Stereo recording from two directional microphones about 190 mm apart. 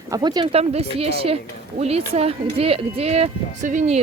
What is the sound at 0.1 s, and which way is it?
Speech, 20° right (ahead or behind).